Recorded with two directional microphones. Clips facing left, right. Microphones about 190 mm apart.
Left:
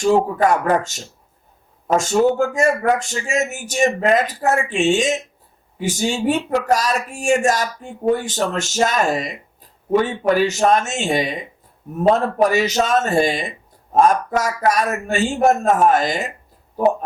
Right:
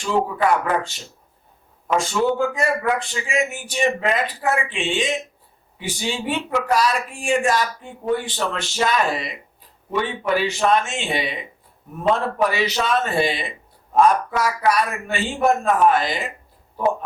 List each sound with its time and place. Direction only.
0.0 s speech: 45° left (ahead or behind)